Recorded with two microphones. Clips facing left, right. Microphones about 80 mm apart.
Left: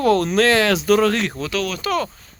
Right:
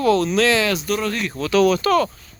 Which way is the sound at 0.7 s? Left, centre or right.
Left.